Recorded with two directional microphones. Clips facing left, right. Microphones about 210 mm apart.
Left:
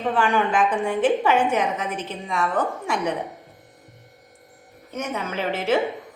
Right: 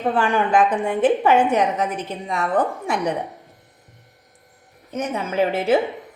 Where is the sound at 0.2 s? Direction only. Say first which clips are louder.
Right 2 dB; 40° right (ahead or behind).